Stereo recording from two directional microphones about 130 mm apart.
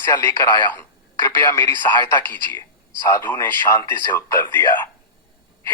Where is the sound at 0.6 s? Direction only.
15° left (ahead or behind).